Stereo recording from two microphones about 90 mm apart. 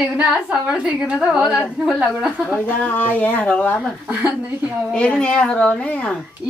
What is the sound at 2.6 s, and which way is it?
Speech, 20° left (ahead or behind).